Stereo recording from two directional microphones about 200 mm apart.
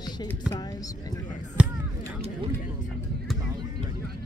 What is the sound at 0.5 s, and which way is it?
Speech, 20° left (ahead or behind).